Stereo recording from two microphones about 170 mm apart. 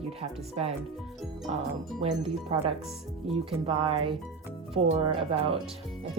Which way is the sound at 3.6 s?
35° right (ahead or behind).